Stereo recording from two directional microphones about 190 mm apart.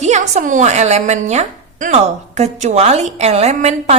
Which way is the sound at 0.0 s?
40° right (ahead or behind).